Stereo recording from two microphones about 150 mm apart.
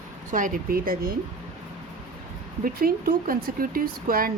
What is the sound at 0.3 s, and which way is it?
Speech, 60° right (ahead or behind).